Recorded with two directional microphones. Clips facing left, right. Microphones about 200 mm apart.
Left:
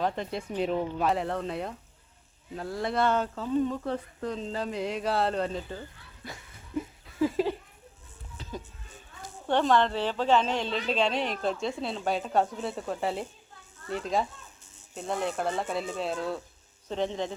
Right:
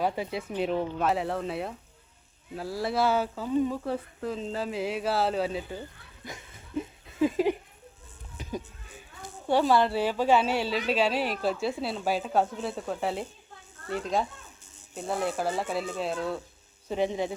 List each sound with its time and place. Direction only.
0.0 s a woman's voice: 5° right (ahead or behind)
6.2 s a sound: 20° right (ahead or behind)
8.4 s music: 15° right (ahead or behind)
9.5 s a woman's voice: 10° right (ahead or behind)